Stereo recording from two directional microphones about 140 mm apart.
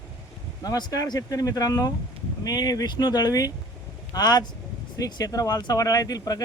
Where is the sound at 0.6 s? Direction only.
30° left (ahead or behind).